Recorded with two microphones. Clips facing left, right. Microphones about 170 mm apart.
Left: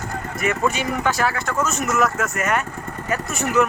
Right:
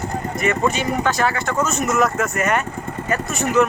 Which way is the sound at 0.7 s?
10° left (ahead or behind).